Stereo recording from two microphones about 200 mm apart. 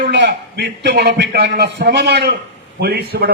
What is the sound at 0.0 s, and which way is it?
A man's voice, 55° right (ahead or behind).